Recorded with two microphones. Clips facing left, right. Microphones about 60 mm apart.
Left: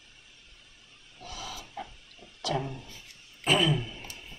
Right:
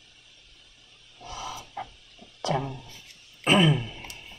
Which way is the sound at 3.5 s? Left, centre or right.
Right.